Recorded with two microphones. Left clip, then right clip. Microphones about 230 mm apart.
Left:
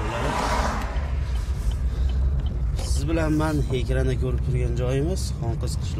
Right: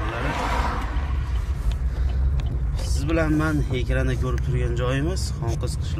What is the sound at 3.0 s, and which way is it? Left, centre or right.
Speech, centre.